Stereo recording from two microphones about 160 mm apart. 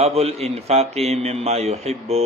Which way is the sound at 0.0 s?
40° right (ahead or behind).